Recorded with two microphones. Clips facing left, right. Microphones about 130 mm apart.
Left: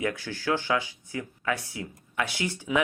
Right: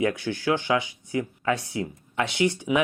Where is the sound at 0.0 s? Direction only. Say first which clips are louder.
Right 5 dB; 20° right (ahead or behind).